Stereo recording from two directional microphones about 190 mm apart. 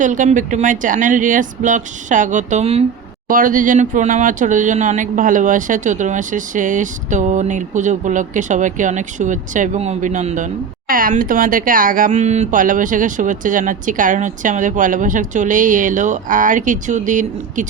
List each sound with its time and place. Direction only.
0.0 s speech: 40° right (ahead or behind)
3.2 s speech: 45° right (ahead or behind)